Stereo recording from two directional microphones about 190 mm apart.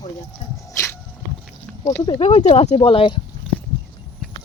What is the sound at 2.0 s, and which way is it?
Speech, 35° left (ahead or behind).